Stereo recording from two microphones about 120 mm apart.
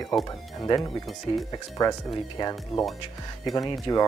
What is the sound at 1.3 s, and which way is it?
Speech, 45° left (ahead or behind).